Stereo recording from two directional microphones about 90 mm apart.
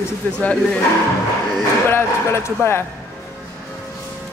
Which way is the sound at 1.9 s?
30° left (ahead or behind).